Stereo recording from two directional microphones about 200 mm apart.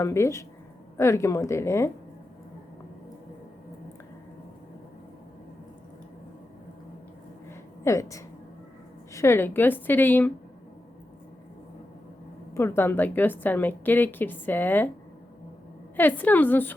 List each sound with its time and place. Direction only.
0.0 s a woman's voice: 15° left (ahead or behind)
7.5 s a sound: 15° left (ahead or behind)
9.1 s a woman's voice: 10° left (ahead or behind)
12.5 s a woman's voice: 10° left (ahead or behind)
16.0 s a woman's voice: 10° left (ahead or behind)